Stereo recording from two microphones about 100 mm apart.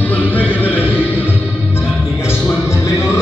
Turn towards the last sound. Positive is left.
turn(degrees=30)  # may be behind; listen again after turning